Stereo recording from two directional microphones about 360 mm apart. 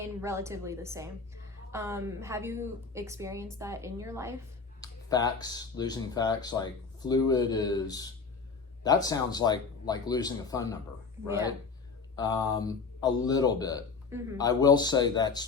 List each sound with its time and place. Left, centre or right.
0.0 s a woman's voice: centre
4.8 s speech: centre
12.1 s speech: centre